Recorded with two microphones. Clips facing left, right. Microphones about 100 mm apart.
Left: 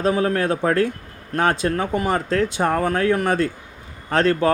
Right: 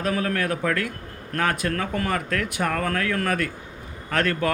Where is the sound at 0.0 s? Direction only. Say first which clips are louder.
Left 5 dB; 25° left (ahead or behind).